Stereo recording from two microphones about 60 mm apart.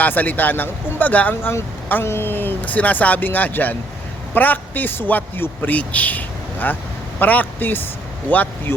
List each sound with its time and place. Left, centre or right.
0.0 s speech: left
1.4 s a man's voice: left